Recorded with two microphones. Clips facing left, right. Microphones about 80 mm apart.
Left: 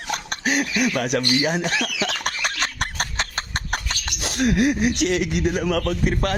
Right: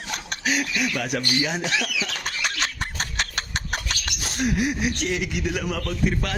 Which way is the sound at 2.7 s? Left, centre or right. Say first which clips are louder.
Left 3 dB; left.